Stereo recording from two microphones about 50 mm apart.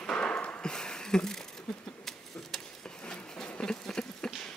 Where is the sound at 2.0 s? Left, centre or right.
Centre.